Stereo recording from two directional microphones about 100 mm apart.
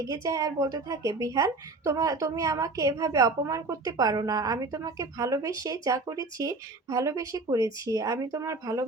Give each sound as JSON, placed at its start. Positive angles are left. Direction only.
{"t": 0.0, "sound": "speech", "side_deg": -35}